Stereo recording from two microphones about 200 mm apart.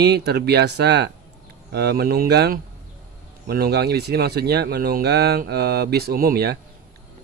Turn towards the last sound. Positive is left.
turn(degrees=-50)  # may be behind; listen again after turning